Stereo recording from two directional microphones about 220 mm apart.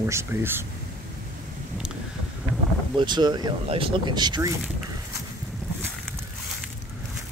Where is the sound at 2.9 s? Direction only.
20° right (ahead or behind).